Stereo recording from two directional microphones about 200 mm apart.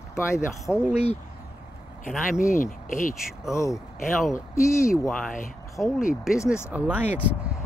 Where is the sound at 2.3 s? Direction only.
40° left (ahead or behind).